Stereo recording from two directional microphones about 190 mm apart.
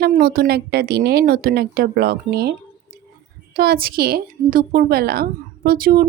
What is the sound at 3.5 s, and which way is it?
Speech, 50° right (ahead or behind).